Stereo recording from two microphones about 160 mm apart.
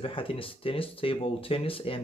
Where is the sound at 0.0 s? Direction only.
35° left (ahead or behind).